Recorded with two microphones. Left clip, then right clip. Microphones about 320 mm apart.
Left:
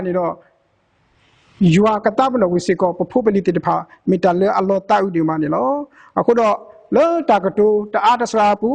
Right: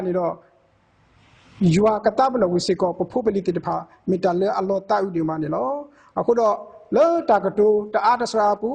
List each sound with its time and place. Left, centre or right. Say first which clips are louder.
0.0 s speech: left 3 dB; left
1.6 s speech: left 3 dB; left